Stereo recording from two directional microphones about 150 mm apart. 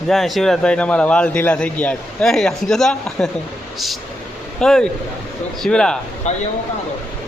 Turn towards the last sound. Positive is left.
turn(degrees=50)  # may be behind; listen again after turning